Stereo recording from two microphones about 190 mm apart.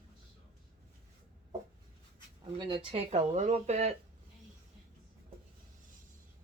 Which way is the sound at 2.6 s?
25° right (ahead or behind).